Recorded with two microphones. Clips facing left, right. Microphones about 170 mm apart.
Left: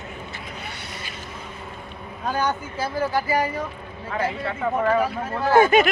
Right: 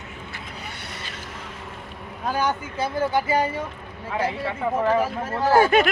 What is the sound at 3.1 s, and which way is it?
Speech, 25° right (ahead or behind).